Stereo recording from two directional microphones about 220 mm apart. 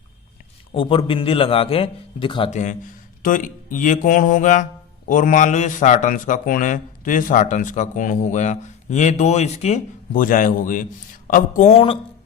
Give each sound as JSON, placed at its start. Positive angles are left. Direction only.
{"t": 0.7, "sound": "a man's voice", "side_deg": 25}
{"t": 3.2, "sound": "a man's voice", "side_deg": 35}